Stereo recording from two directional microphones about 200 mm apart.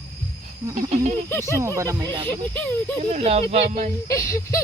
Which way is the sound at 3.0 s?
35° right (ahead or behind).